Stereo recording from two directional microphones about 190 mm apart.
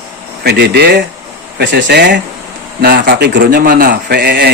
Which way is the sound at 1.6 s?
70° right (ahead or behind).